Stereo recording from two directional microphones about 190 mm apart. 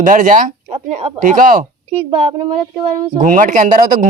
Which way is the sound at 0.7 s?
35° right (ahead or behind).